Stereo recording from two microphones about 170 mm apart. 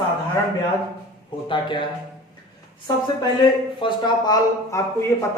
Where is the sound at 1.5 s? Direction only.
30° left (ahead or behind).